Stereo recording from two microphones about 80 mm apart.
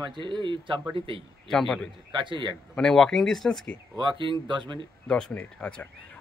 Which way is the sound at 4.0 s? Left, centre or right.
Right.